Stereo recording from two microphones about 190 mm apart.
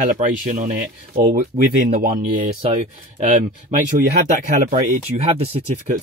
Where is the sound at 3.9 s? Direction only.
45° right (ahead or behind).